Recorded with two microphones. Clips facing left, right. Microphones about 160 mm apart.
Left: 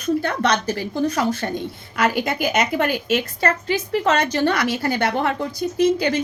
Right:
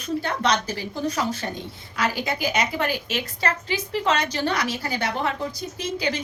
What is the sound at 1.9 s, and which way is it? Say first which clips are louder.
A woman's voice: left 5 dB; 55° left (ahead or behind).